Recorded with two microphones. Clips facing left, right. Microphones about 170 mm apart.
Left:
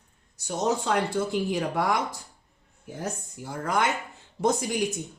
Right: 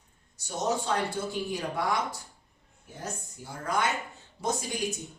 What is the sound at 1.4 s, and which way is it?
Speech, 65° left (ahead or behind).